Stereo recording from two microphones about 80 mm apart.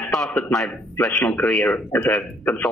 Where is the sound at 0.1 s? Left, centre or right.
Centre.